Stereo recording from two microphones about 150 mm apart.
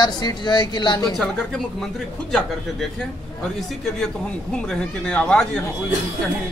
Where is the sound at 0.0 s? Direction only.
25° left (ahead or behind).